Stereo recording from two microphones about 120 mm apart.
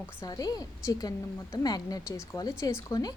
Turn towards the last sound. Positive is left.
turn(degrees=30)  # may be behind; listen again after turning